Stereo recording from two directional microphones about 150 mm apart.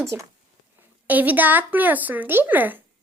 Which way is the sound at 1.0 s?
10° right (ahead or behind).